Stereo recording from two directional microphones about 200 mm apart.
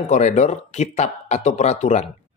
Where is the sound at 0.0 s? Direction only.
35° left (ahead or behind).